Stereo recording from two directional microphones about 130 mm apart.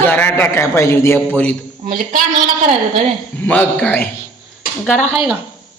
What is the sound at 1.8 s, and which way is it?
Speech, 90° right.